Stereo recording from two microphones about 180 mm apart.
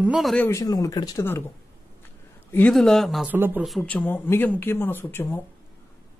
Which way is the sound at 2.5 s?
5° left (ahead or behind).